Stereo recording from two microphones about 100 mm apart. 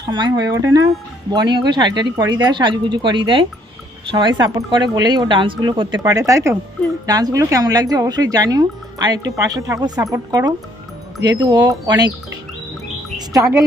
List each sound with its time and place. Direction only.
0.0 s speech: 45° right (ahead or behind)
1.3 s speech: 45° right (ahead or behind)
6.0 s speech: 35° right (ahead or behind)
13.1 s chirp: 35° right (ahead or behind)